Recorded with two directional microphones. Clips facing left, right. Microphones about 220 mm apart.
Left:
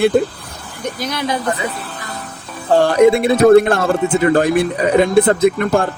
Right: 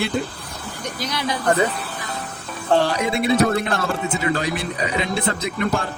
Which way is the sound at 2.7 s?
50° left (ahead or behind).